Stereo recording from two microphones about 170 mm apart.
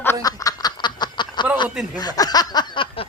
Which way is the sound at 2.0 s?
25° left (ahead or behind).